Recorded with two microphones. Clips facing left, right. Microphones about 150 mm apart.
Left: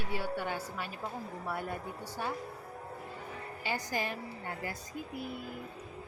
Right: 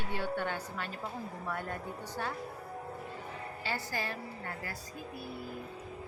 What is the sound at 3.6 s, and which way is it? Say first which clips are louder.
A woman's voice: left 2 dB; 15° left (ahead or behind).